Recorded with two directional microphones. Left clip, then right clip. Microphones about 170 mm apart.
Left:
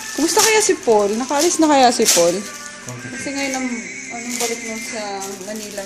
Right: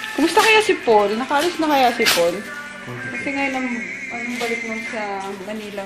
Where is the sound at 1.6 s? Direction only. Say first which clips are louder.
Left 5 dB; 80° left.